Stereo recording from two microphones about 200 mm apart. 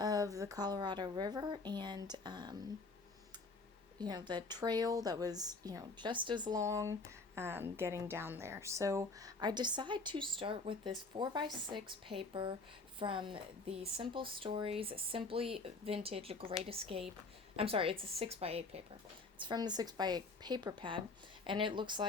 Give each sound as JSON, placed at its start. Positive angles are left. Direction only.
{"t": 0.0, "sound": "a woman's voice", "side_deg": -20}
{"t": 4.0, "sound": "a woman's voice", "side_deg": -20}